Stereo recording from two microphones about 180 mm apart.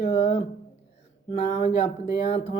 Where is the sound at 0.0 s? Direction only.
35° left (ahead or behind).